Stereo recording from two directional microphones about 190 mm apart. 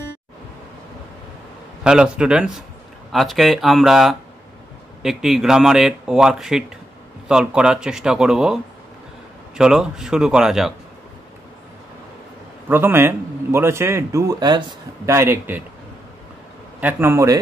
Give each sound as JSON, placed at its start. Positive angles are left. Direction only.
{"t": 1.8, "sound": "speech", "side_deg": -5}
{"t": 9.6, "sound": "speech", "side_deg": -5}
{"t": 12.6, "sound": "a man's voice", "side_deg": -10}
{"t": 16.8, "sound": "a man's voice", "side_deg": -10}